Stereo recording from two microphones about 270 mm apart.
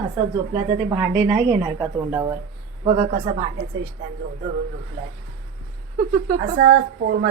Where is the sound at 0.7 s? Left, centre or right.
Centre.